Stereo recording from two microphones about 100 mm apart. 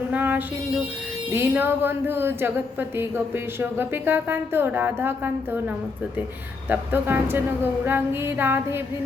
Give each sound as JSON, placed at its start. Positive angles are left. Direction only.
{"t": 0.1, "sound": "music", "side_deg": -15}
{"t": 1.3, "sound": "speech", "side_deg": -20}